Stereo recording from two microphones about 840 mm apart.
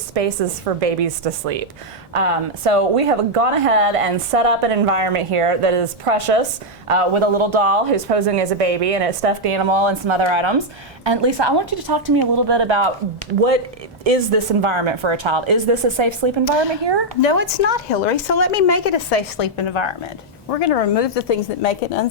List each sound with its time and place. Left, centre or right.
0.1 s a woman's voice: right
14.0 s a woman's voice: right
17.2 s a woman's voice: left
20.5 s a woman's voice: left